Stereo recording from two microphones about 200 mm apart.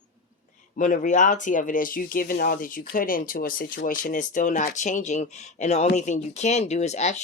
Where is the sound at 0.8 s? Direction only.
40° left (ahead or behind).